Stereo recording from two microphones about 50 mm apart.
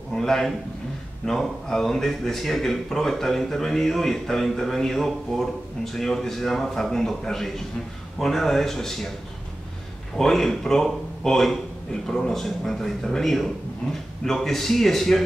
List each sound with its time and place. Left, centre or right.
0.1 s a man's voice: centre
10.1 s a man's voice: centre